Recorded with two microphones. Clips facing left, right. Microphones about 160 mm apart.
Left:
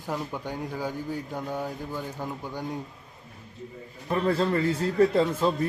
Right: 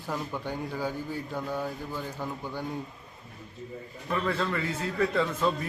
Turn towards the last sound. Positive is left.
turn(degrees=35)  # may be behind; listen again after turning